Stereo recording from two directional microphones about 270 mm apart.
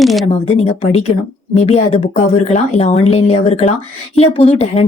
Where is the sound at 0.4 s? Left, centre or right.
Left.